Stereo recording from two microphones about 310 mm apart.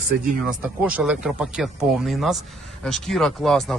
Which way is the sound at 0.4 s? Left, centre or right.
Centre.